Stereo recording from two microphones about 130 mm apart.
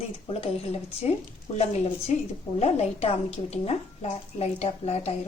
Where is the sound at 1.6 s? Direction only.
55° left (ahead or behind).